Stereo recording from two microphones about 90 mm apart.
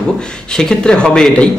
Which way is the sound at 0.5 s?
10° left (ahead or behind).